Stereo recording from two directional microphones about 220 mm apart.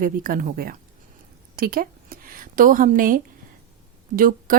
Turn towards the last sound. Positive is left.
turn(degrees=-40)  # may be behind; listen again after turning